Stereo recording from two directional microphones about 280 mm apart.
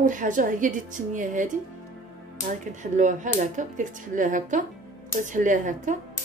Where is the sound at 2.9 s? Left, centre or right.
Right.